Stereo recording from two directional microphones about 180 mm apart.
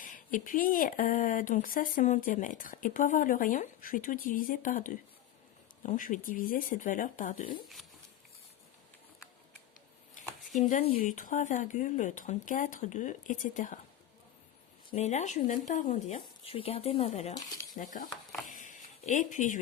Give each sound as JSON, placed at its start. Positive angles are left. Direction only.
{"t": 0.0, "sound": "speech", "side_deg": 45}
{"t": 10.6, "sound": "speech", "side_deg": 40}
{"t": 14.8, "sound": "speech", "side_deg": 40}
{"t": 17.7, "sound": "speech", "side_deg": 45}
{"t": 18.4, "sound": "a sound", "side_deg": 45}